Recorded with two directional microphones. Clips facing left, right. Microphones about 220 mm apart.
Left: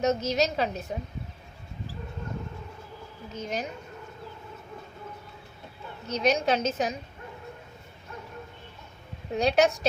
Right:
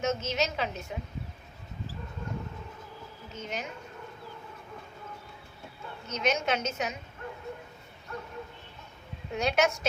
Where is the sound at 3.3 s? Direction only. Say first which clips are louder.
Left 5 dB; 35° left (ahead or behind).